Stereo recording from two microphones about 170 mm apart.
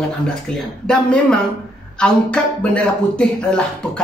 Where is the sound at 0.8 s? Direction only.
5° left (ahead or behind).